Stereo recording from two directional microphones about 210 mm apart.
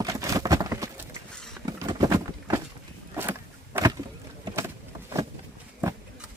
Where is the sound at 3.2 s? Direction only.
10° right (ahead or behind).